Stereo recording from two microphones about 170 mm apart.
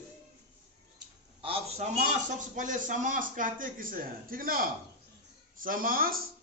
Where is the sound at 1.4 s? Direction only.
35° right (ahead or behind).